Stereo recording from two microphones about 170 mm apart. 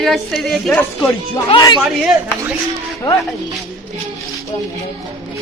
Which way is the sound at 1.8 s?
5° right (ahead or behind).